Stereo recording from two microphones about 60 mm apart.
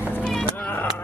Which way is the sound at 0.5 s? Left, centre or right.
Left.